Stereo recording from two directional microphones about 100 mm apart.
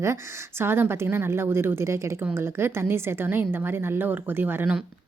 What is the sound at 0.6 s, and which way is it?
A woman's voice, 25° right (ahead or behind).